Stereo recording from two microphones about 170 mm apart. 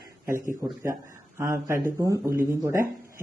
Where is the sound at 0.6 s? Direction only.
15° right (ahead or behind).